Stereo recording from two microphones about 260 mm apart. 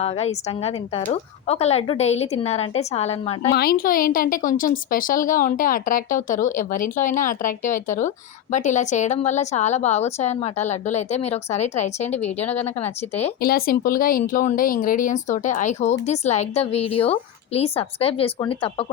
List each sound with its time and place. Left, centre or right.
0.0 s speech: left
3.5 s a woman's voice: left
13.4 s speech: left; by 18.9 s centre